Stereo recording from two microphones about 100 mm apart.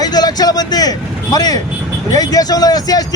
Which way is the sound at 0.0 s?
40° left (ahead or behind).